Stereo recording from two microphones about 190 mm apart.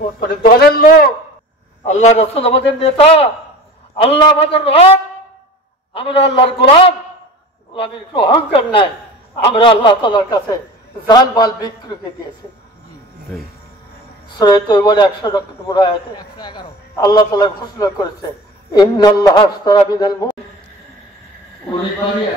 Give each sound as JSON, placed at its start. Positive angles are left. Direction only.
{"t": 0.3, "sound": "a man's voice", "side_deg": 55}
{"t": 1.9, "sound": "a man's voice", "side_deg": 35}
{"t": 5.9, "sound": "a man's voice", "side_deg": 30}
{"t": 14.3, "sound": "a man's voice", "side_deg": 20}